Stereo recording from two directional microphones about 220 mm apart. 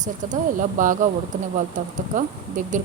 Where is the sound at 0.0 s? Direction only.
35° right (ahead or behind).